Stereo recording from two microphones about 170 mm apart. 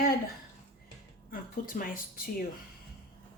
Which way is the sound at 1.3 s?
55° left (ahead or behind).